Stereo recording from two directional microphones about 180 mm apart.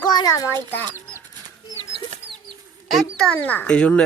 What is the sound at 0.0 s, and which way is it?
Speech, 20° left (ahead or behind).